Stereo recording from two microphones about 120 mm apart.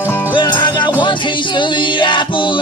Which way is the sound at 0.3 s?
40° left (ahead or behind).